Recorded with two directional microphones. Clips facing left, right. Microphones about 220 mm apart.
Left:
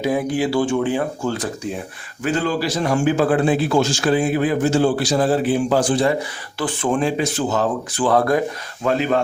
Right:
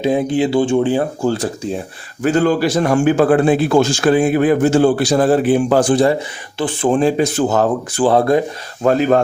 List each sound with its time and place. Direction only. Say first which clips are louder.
0.0 s speech: right 4 dB; 25° right (ahead or behind)
2.2 s a man's voice: right 6 dB; 50° right (ahead or behind)
6.1 s speech: right 3 dB; 25° right (ahead or behind); by 8.0 s 50° right (ahead or behind)
8.0 s speech: right 4 dB; 25° right (ahead or behind)
8.8 s a man's voice: right 6 dB; 45° right (ahead or behind)